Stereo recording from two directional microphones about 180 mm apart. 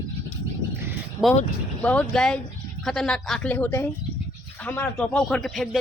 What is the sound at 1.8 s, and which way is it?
Speech, 5° left (ahead or behind).